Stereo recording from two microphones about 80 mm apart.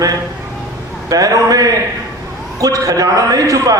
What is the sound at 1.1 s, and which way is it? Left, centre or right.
A man's voice, right.